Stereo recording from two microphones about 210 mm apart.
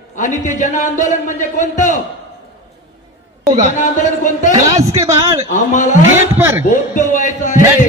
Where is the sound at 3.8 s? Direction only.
35° left (ahead or behind).